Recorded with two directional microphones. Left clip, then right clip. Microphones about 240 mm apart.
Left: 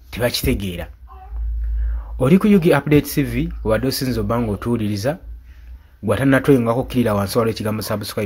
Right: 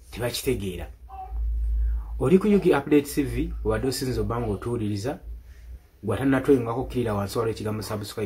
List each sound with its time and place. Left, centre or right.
0.1 s speech: left
2.1 s speech: left